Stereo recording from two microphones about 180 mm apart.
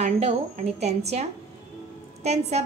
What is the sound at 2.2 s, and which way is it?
Speech, 40° right (ahead or behind).